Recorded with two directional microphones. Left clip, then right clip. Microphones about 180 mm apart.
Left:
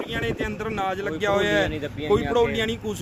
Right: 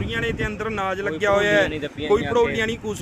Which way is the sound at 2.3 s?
20° left (ahead or behind).